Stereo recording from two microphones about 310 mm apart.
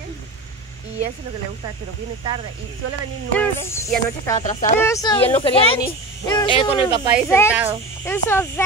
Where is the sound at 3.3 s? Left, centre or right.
Centre.